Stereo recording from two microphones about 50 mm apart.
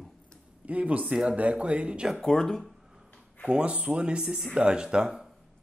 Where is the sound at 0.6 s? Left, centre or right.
Right.